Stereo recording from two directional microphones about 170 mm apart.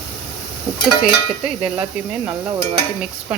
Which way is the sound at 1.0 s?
5° right (ahead or behind).